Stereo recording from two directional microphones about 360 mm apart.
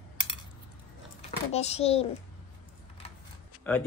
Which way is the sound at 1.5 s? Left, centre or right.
Centre.